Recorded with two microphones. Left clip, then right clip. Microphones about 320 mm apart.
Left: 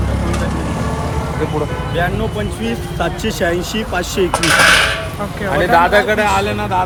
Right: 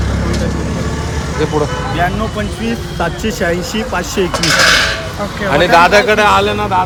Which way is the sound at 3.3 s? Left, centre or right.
Centre.